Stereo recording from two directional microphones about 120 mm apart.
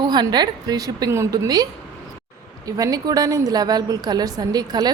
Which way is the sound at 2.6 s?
30° right (ahead or behind).